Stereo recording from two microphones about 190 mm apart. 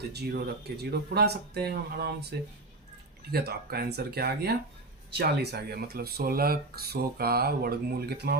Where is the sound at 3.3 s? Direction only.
55° right (ahead or behind).